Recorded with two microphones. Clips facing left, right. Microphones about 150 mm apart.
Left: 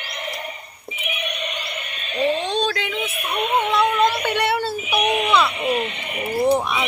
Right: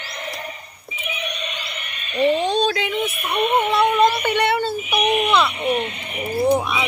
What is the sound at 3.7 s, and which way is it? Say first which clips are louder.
A child's voice: right 1 dB; 5° right (ahead or behind).